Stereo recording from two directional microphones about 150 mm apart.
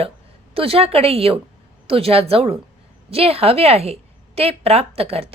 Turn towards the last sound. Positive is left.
turn(degrees=-40)  # may be behind; listen again after turning